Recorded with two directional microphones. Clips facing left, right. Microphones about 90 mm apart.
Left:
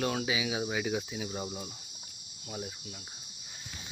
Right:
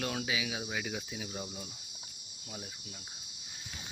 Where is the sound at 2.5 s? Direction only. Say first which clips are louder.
Left 6 dB; 10° left (ahead or behind).